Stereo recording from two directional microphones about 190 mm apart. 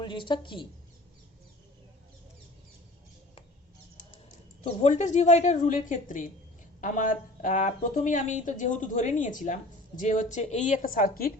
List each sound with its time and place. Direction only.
0.0 s a woman's voice: 25° left (ahead or behind)
4.6 s a woman's voice: 35° left (ahead or behind)